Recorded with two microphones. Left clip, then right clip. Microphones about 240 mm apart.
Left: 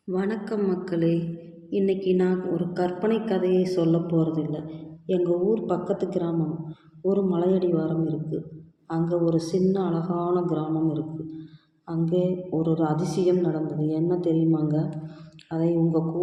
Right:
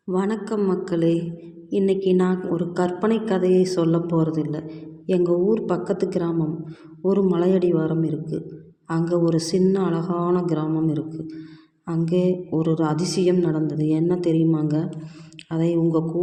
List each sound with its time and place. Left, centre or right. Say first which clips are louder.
0.1 s a woman's voice: right 3 dB; right